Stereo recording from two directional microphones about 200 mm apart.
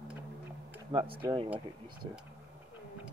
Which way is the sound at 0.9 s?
25° right (ahead or behind).